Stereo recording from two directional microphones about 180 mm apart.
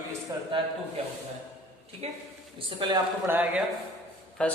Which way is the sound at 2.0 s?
35° right (ahead or behind).